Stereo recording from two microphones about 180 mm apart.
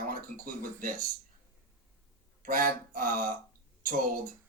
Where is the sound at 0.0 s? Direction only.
50° right (ahead or behind).